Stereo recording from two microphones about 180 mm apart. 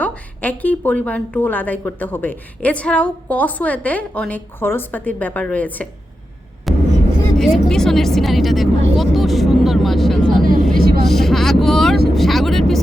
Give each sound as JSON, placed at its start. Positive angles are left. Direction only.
{"t": 0.0, "sound": "a woman's voice", "side_deg": 10}
{"t": 6.7, "sound": "vehicle", "side_deg": 0}
{"t": 10.8, "sound": "vehicle", "side_deg": -55}
{"t": 11.0, "sound": "vehicle", "side_deg": 0}